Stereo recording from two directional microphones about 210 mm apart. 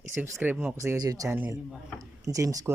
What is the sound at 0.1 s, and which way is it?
Speech, 10° right (ahead or behind).